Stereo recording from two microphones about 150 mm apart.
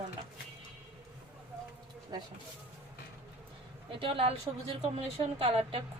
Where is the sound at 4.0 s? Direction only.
40° right (ahead or behind).